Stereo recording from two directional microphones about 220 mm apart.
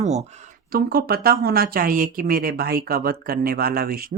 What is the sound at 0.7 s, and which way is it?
Speech, 40° right (ahead or behind).